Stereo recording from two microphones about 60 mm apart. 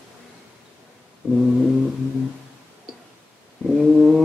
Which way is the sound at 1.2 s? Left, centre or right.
Right.